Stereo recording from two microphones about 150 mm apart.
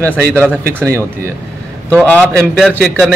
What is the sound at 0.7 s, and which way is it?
Speech, 15° right (ahead or behind).